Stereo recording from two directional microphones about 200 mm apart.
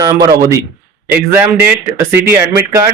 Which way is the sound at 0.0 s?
20° right (ahead or behind).